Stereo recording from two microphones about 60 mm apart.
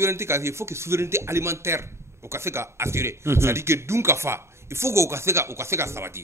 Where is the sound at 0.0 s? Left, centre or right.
Right.